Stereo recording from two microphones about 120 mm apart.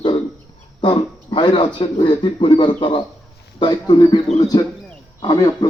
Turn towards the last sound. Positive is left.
turn(degrees=35)  # may be behind; listen again after turning